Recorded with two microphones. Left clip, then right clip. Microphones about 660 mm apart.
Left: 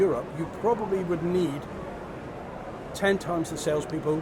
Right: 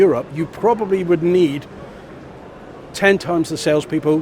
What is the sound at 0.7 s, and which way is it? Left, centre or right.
Speech, right.